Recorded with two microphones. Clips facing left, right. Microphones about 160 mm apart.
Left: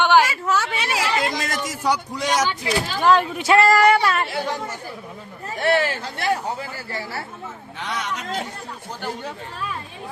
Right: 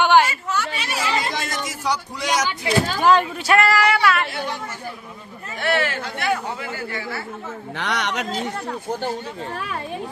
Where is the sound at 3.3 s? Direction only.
20° left (ahead or behind).